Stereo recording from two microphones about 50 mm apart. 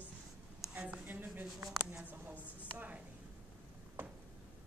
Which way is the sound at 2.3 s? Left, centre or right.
Left.